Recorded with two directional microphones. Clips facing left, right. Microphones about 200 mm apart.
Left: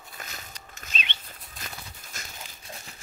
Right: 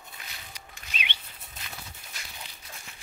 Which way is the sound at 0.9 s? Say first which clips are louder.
Left 1 dB; 10° right (ahead or behind).